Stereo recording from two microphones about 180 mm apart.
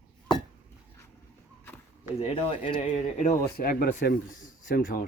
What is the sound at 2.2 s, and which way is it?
Speech, 30° left (ahead or behind).